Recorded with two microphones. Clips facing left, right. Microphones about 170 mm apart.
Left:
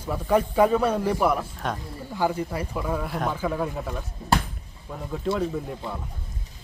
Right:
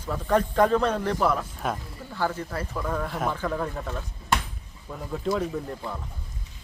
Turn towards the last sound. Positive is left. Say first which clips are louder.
# left 1 dB
turn(degrees=5)  # may be behind; listen again after turning